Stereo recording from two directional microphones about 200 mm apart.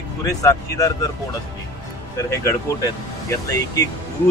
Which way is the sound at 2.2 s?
15° left (ahead or behind).